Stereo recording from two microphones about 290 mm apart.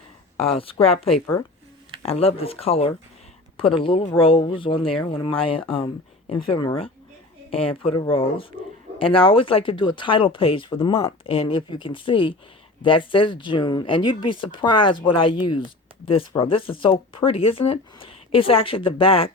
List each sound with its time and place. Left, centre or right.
0.3 s speech: centre